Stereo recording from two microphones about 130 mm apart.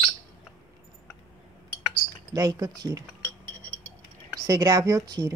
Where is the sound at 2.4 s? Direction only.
30° right (ahead or behind).